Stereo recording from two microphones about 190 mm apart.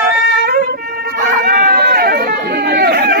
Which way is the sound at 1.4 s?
55° right (ahead or behind).